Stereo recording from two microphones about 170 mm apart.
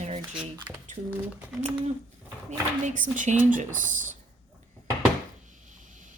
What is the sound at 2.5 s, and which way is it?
A woman's voice, 45° right (ahead or behind).